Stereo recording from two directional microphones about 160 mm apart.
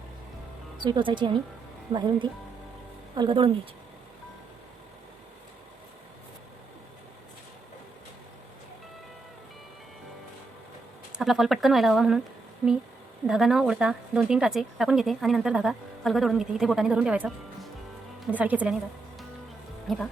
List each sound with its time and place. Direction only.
0.8 s speech: 30° right (ahead or behind)
11.2 s speech: centre (ahead or behind)
13.2 s speech: centre (ahead or behind)
19.9 s speech: centre (ahead or behind)